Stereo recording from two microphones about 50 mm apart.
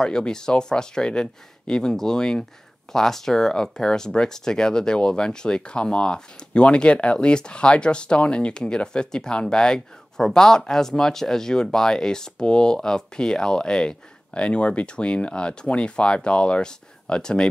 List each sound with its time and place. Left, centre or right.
0.0 s speech: centre